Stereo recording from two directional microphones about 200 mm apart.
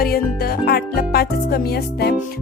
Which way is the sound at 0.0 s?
50° left (ahead or behind).